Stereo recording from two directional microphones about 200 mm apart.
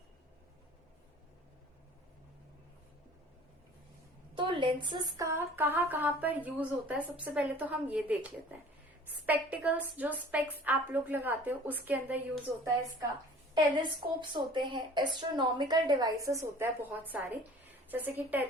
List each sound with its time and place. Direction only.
4.4 s speech: 25° right (ahead or behind); by 12.2 s 10° right (ahead or behind)
13.5 s a woman's voice: 25° right (ahead or behind)